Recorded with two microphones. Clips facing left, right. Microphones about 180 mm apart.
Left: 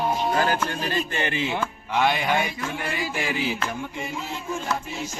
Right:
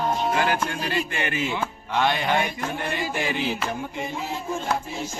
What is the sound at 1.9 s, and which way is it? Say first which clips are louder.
Music: even; 5° left (ahead or behind).